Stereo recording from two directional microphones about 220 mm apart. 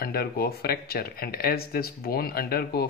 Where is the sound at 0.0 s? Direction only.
45° left (ahead or behind).